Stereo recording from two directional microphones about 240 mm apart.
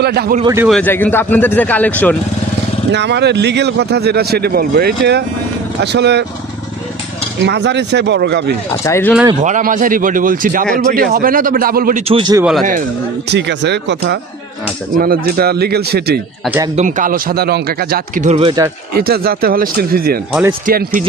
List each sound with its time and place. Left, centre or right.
0.0 s a man's voice: right
0.4 s speech: centre
0.7 s speech: centre
2.9 s speech: right
7.4 s speech: right
8.8 s speech: centre
9.4 s speech: right
12.1 s speech: centre
13.3 s speech: right; by 18.7 s centre
18.9 s speech: right